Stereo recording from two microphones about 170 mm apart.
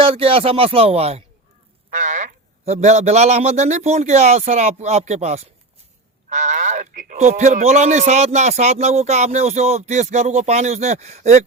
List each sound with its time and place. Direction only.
0.0 s speech: 35° right (ahead or behind)